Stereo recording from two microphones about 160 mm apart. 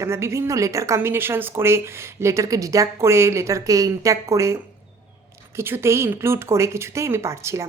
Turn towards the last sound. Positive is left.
turn(degrees=-15)  # may be behind; listen again after turning